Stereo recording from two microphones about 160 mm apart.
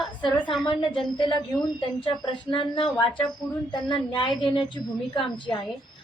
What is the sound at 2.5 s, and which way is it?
A woman's voice, 30° left (ahead or behind).